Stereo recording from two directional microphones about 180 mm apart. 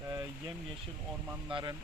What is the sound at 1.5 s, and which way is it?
Speech, 25° right (ahead or behind).